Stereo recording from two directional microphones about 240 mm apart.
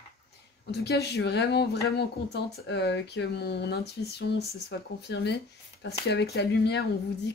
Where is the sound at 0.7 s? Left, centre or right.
Left.